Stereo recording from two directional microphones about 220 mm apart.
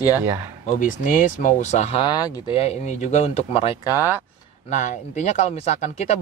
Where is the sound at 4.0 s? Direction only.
10° right (ahead or behind).